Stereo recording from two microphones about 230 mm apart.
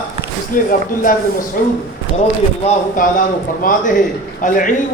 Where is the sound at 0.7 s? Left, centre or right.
Left.